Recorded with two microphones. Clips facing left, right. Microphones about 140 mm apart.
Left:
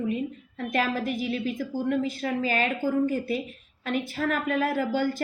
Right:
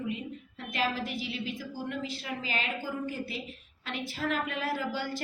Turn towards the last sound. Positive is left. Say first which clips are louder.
# left 7 dB
turn(degrees=50)  # may be behind; listen again after turning